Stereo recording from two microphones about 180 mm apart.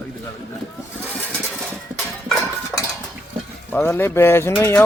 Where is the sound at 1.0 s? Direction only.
10° right (ahead or behind).